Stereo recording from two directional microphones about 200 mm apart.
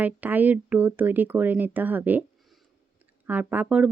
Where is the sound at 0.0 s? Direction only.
10° right (ahead or behind).